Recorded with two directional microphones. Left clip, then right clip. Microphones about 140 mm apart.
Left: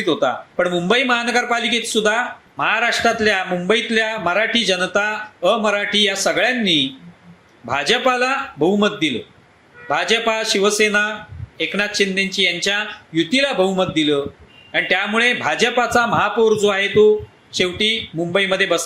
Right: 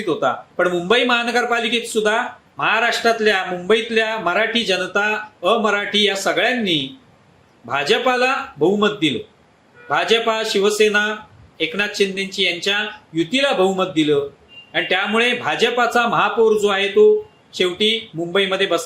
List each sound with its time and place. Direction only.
0.0 s a man's voice: 20° left (ahead or behind)